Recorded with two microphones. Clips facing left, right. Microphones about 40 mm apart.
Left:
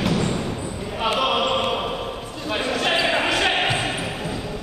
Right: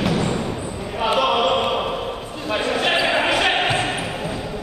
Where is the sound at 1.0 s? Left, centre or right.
Centre.